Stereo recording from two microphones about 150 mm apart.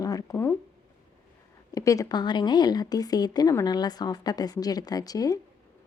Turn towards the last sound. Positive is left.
turn(degrees=25)  # may be behind; listen again after turning